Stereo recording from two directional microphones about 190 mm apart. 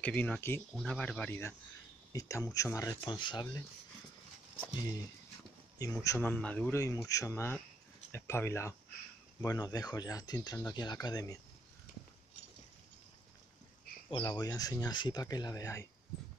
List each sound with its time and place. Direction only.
0.0 s speech: 10° left (ahead or behind)
5.8 s speech: 15° left (ahead or behind)
14.1 s speech: 20° left (ahead or behind)